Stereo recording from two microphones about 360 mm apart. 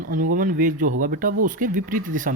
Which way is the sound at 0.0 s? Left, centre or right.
Right.